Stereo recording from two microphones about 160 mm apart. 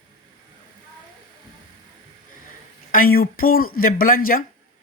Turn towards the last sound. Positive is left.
turn(degrees=60)  # may be behind; listen again after turning